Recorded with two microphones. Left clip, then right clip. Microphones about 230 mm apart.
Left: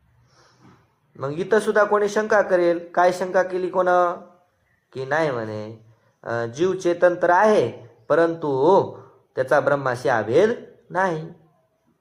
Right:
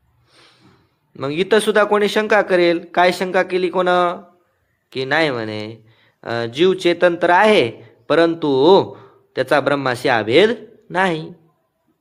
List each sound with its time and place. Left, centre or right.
1.3 s speech: right
2.1 s speech: right
2.5 s speech: right